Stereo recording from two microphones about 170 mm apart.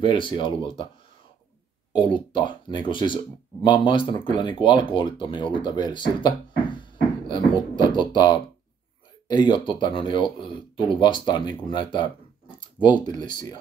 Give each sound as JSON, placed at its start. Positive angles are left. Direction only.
{"t": 0.0, "sound": "speech", "side_deg": 30}
{"t": 1.9, "sound": "speech", "side_deg": 25}